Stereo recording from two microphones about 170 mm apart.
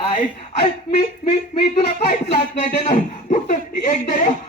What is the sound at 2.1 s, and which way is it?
Speech, 80° left.